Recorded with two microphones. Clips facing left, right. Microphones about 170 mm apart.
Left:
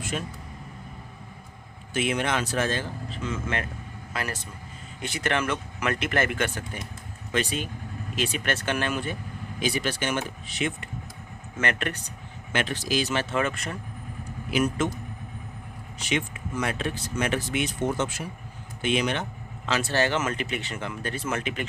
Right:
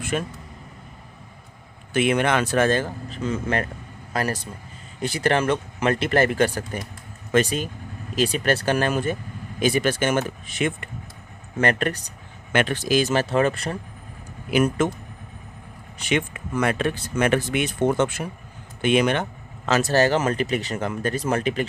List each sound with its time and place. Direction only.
0.0 s speech: 55° right (ahead or behind)
1.9 s speech: 60° right (ahead or behind)
11.5 s speech: 35° right (ahead or behind)
12.5 s speech: 55° right (ahead or behind); by 13.7 s 35° right (ahead or behind)
14.5 s speech: 55° right (ahead or behind)
16.0 s speech: 55° right (ahead or behind)
19.6 s speech: 45° right (ahead or behind)